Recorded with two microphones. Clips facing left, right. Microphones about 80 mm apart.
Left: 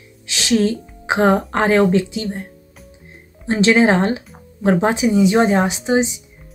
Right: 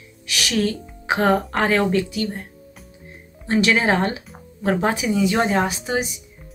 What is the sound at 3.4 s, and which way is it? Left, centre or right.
Speech, left.